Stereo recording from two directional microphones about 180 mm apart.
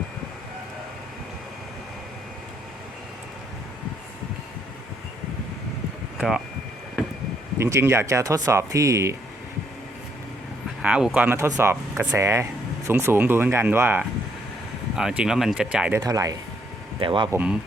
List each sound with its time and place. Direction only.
6.1 s speech: centre (ahead or behind)
7.6 s speech: 15° right (ahead or behind)
10.8 s speech: 5° right (ahead or behind)
16.0 s speech: 20° right (ahead or behind)
17.0 s speech: 30° right (ahead or behind)
17.3 s speech: 5° right (ahead or behind)